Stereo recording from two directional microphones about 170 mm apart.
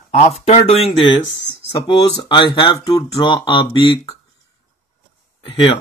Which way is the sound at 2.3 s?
30° left (ahead or behind).